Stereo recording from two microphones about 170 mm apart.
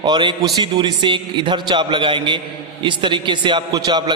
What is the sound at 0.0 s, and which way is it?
A man's voice, 25° right (ahead or behind).